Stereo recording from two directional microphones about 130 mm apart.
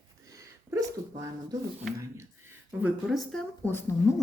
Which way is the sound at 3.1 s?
5° left (ahead or behind).